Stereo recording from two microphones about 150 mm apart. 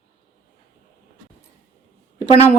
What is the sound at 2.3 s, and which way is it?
Speech, 45° left (ahead or behind).